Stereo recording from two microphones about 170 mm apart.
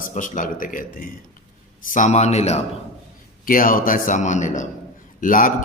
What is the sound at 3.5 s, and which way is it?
A man's voice, 55° left (ahead or behind).